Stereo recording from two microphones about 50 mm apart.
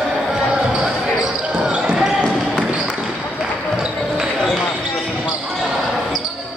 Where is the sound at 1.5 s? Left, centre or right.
Centre.